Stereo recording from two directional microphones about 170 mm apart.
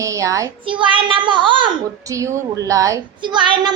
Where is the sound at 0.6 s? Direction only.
30° right (ahead or behind).